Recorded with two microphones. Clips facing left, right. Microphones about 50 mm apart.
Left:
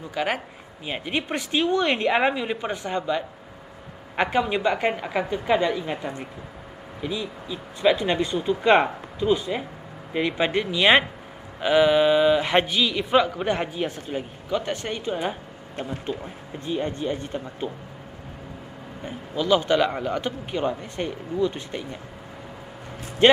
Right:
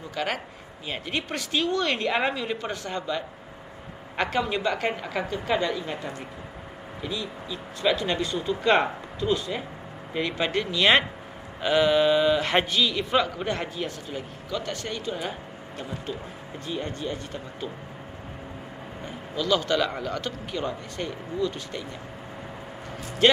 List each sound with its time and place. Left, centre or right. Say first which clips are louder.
0.1 s a man's voice: left 3 dB; centre; by 17.6 s left
19.0 s a man's voice: left 3 dB; left
23.2 s a man's voice: left 4 dB; left